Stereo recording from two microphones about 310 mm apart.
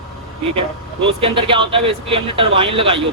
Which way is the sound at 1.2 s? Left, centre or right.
Centre.